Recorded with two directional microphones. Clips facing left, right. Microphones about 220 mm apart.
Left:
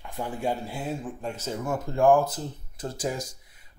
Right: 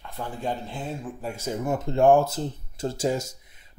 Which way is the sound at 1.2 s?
10° right (ahead or behind).